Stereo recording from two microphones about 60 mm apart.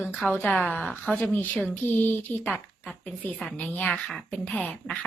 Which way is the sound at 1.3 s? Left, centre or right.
Left.